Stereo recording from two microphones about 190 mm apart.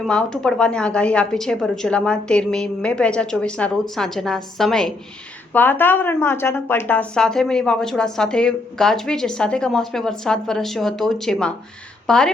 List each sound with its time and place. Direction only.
0.0 s speech: 5° left (ahead or behind)